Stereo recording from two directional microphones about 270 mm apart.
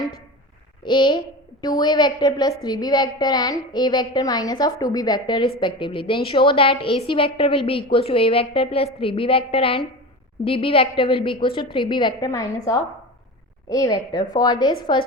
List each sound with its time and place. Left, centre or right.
0.8 s a woman's voice: centre